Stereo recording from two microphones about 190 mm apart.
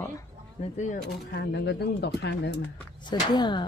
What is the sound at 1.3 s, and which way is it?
Speech, 60° left (ahead or behind).